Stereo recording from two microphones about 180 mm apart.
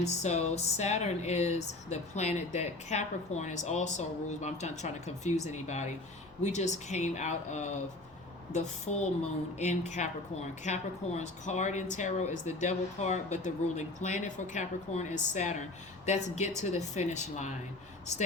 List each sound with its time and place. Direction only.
0.0 s speech: 40° left (ahead or behind)